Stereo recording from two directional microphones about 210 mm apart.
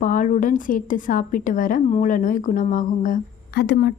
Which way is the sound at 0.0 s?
40° left (ahead or behind).